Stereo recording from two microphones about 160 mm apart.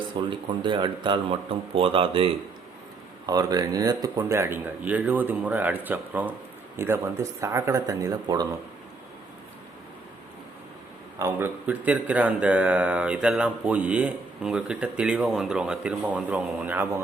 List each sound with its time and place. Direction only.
0.1 s speech: 30° right (ahead or behind)
3.2 s speech: 25° right (ahead or behind)
11.2 s speech: 15° right (ahead or behind)